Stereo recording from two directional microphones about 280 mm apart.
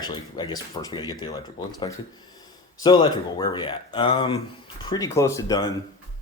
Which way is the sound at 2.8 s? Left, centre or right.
Centre.